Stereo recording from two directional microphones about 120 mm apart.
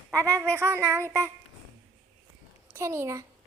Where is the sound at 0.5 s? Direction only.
20° right (ahead or behind).